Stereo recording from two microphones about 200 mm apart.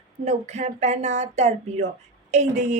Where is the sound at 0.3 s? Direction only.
35° right (ahead or behind).